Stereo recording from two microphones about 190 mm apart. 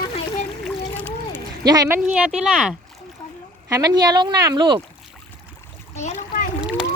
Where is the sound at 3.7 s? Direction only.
20° right (ahead or behind).